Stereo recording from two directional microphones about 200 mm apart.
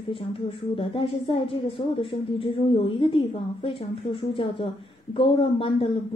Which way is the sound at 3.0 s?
25° left (ahead or behind).